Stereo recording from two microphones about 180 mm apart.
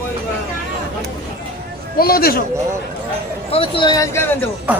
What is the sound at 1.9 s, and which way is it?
Speech, 55° left (ahead or behind).